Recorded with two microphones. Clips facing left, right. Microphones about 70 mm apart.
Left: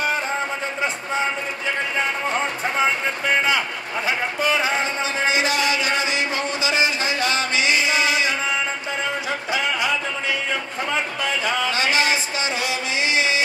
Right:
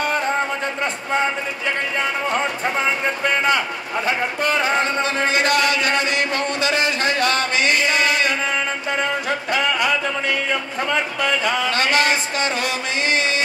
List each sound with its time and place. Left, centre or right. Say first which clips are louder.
3.3 s speech: right 1 dB; right
4.5 s music: right 2 dB; right
9.5 s a sound: right 3 dB; right
10.9 s speech: right 3 dB; right